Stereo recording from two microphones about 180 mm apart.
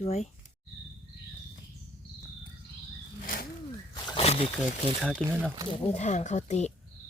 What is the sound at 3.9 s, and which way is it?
Wild animals, 25° left (ahead or behind).